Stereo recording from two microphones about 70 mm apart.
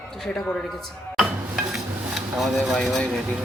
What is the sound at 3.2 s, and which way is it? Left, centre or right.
Speech, centre.